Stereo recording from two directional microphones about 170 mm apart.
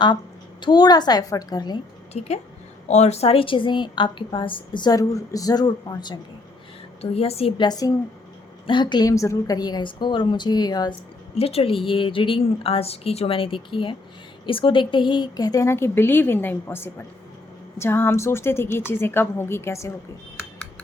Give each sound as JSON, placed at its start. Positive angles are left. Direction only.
{"t": 0.6, "sound": "a woman's voice", "side_deg": 25}
{"t": 2.1, "sound": "a woman's voice", "side_deg": 40}
{"t": 7.0, "sound": "a woman's voice", "side_deg": 35}
{"t": 7.7, "sound": "a woman's voice", "side_deg": 20}
{"t": 11.3, "sound": "a woman's voice", "side_deg": 35}